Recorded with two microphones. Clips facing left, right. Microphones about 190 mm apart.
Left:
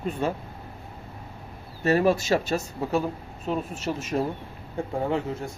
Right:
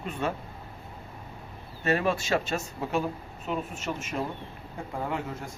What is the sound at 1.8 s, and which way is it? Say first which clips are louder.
Speech: left 5 dB; 40° left (ahead or behind).